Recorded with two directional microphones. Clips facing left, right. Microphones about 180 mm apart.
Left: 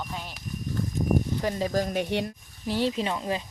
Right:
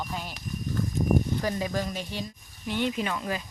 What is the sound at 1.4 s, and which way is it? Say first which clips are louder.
Speech: left 2 dB; 25° left (ahead or behind).